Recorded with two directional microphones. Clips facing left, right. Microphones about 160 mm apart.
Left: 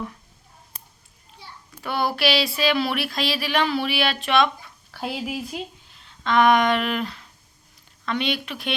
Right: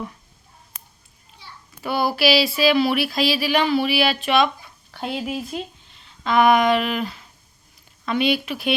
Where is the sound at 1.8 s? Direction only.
5° right (ahead or behind).